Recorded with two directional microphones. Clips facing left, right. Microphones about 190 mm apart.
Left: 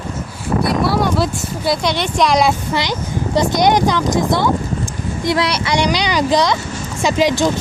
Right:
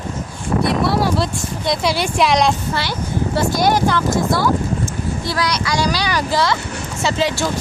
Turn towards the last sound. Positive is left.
turn(degrees=15)  # may be behind; listen again after turning